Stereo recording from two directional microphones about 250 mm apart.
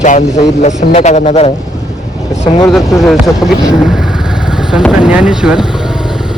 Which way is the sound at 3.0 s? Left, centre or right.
Centre.